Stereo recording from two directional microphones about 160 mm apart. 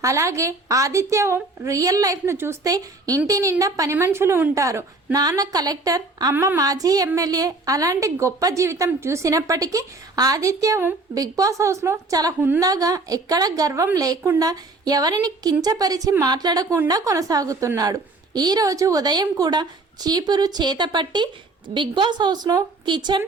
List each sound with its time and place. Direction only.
0.0 s a woman's voice: 20° right (ahead or behind)
6.3 s a woman's voice: 10° right (ahead or behind)
6.6 s a woman's voice: 20° right (ahead or behind)